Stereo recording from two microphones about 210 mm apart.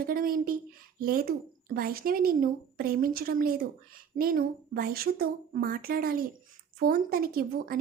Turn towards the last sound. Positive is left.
turn(degrees=-45)  # may be behind; listen again after turning